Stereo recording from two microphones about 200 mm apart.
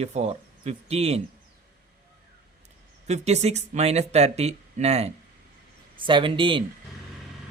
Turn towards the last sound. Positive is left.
turn(degrees=-25)  # may be behind; listen again after turning